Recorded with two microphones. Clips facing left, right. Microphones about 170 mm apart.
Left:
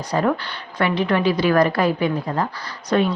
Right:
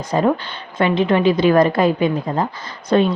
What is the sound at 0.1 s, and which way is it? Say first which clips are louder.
A woman's voice: right 3 dB; 20° right (ahead or behind).